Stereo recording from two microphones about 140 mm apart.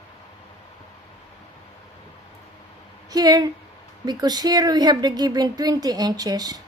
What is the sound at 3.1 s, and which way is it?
Speech, 30° right (ahead or behind).